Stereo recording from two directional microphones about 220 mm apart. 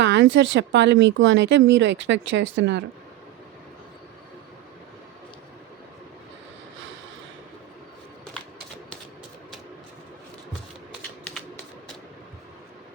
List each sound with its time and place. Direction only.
0.0 s speech: 55° right (ahead or behind)